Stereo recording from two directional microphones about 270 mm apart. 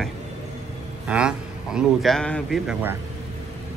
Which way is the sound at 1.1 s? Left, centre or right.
Centre.